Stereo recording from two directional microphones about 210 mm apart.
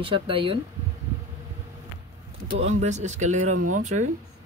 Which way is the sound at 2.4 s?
30° right (ahead or behind).